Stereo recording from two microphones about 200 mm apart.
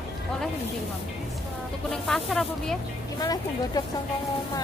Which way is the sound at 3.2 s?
20° left (ahead or behind).